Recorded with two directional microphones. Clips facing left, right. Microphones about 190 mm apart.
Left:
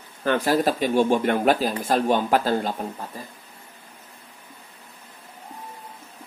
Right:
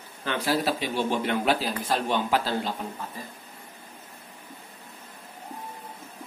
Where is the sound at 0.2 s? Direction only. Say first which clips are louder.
Left 6 dB; 50° left (ahead or behind).